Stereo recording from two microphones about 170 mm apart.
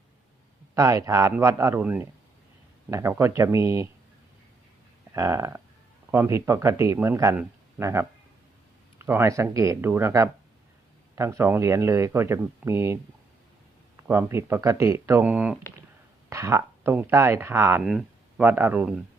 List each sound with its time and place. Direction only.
0.7 s speech: 20° right (ahead or behind)
5.1 s speech: 20° right (ahead or behind)
14.1 s speech: 15° right (ahead or behind)